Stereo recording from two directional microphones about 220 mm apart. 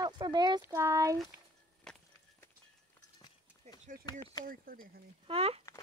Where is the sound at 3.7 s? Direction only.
30° right (ahead or behind).